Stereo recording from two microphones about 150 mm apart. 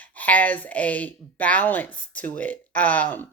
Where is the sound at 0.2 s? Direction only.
10° left (ahead or behind).